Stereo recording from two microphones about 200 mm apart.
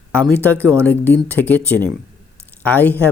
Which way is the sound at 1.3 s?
10° left (ahead or behind).